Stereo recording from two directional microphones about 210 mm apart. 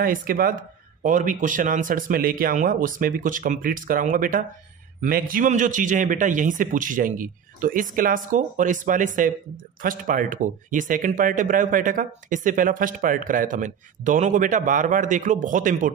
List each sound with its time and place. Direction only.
0.0 s speech: 40° right (ahead or behind)